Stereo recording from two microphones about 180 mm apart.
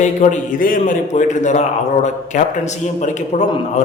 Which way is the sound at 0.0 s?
40° left (ahead or behind).